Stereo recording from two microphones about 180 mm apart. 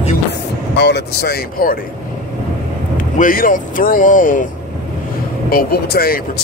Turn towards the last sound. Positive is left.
turn(degrees=55)  # may be behind; listen again after turning